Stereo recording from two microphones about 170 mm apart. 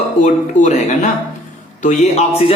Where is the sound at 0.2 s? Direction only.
45° left (ahead or behind).